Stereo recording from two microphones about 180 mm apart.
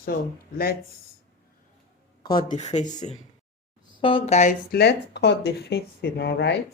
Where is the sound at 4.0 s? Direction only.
30° left (ahead or behind).